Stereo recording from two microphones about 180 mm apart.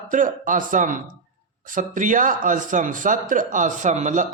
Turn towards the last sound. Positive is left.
turn(degrees=-45)  # may be behind; listen again after turning